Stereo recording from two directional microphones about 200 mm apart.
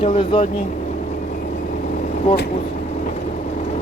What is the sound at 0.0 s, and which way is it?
Speech, 25° left (ahead or behind).